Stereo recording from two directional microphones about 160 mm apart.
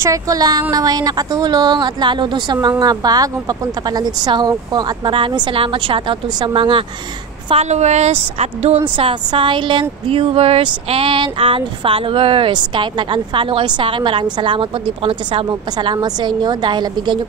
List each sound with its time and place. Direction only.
0.0 s speech: 20° right (ahead or behind)
7.4 s a woman's voice: 40° right (ahead or behind)
8.8 s speech: 30° right (ahead or behind)